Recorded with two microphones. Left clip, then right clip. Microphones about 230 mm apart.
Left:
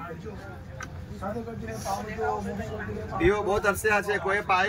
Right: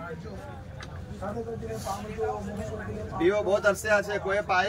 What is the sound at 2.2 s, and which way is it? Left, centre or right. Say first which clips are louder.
Speech: left 2 dB; left.